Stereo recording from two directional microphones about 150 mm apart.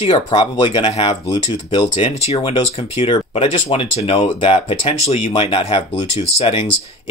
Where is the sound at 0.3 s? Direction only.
35° left (ahead or behind).